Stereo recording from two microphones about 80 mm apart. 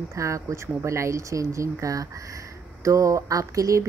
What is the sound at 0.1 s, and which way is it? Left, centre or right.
Speech, right.